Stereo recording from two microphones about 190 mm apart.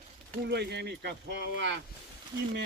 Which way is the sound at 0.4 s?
60° right (ahead or behind).